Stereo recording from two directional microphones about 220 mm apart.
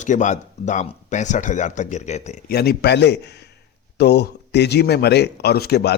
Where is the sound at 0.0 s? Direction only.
35° left (ahead or behind).